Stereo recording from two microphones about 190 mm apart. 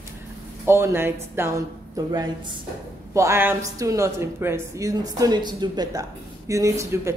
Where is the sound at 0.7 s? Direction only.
15° right (ahead or behind).